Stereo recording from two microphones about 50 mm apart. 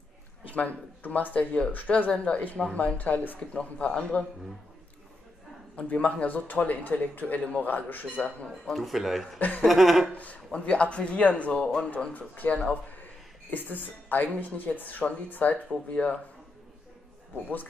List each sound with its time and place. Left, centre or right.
0.5 s speech: left
5.8 s speech: left
8.7 s speech: centre
10.1 s speech: left
11.5 s speech: centre
12.1 s speech: left